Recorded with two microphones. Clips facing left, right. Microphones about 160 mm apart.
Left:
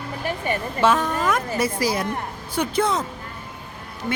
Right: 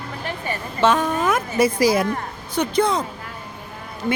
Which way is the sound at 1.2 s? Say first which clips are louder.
Right 3 dB; 10° right (ahead or behind).